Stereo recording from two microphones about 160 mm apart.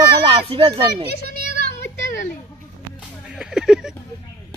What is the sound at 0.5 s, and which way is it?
Speech, 35° right (ahead or behind).